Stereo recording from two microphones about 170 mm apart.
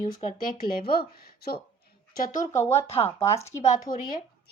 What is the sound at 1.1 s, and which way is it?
Speech, 60° left (ahead or behind).